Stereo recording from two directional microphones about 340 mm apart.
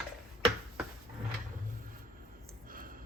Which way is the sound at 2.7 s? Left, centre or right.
Right.